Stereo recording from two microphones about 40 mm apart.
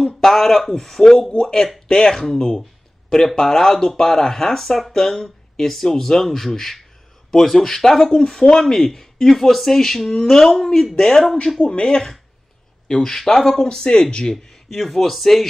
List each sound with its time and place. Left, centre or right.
0.1 s speech: centre
11.6 s speech: left
12.8 s speech: centre
14.3 s a man's voice: centre